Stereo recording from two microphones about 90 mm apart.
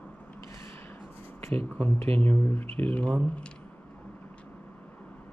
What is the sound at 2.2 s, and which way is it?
Speech, 20° left (ahead or behind).